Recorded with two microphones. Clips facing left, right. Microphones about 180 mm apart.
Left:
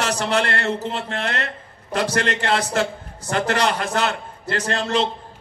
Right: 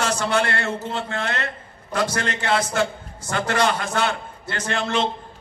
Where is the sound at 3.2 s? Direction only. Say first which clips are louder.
Left 1 dB; 35° left (ahead or behind).